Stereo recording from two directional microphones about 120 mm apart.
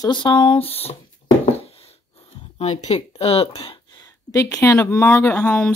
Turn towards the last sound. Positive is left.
turn(degrees=10)  # may be behind; listen again after turning